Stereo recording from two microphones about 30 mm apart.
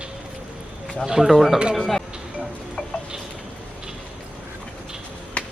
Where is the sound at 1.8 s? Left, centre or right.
Centre.